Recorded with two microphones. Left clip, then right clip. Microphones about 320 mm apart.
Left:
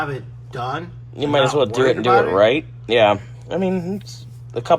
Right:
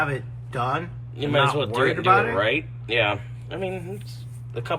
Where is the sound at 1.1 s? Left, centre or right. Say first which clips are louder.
Left 4 dB; centre.